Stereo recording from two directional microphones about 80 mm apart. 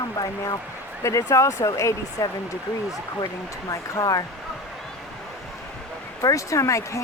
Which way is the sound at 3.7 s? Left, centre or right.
Left.